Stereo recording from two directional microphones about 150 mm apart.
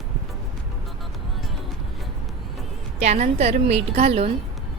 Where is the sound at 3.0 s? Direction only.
50° right (ahead or behind).